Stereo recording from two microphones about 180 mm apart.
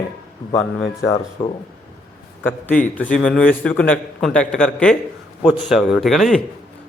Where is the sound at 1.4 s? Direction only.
25° left (ahead or behind).